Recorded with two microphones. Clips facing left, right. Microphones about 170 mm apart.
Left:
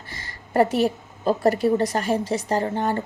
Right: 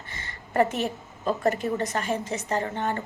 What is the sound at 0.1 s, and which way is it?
A woman's voice, 35° left (ahead or behind).